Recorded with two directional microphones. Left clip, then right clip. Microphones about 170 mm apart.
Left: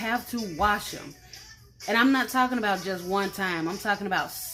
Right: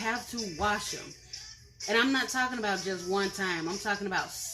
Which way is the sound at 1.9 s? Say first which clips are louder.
Left 4 dB; 55° left (ahead or behind).